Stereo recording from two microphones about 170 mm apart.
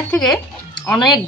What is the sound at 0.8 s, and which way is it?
Speech, 25° left (ahead or behind).